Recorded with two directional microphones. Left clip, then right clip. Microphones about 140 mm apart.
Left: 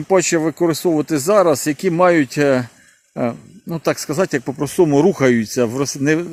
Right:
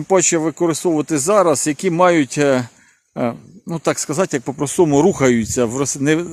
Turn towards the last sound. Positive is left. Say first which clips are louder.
# even
turn(degrees=-25)  # may be behind; listen again after turning